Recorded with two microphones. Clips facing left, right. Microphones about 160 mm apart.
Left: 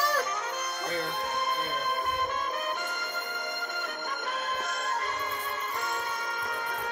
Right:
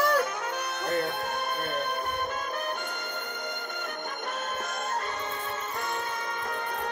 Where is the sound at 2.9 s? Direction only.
45° left (ahead or behind).